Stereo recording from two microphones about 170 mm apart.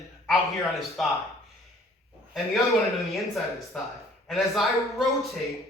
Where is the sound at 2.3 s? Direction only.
Centre (ahead or behind).